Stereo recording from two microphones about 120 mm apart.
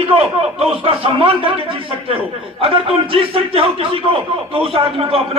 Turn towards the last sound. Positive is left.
turn(degrees=-50)  # may be behind; listen again after turning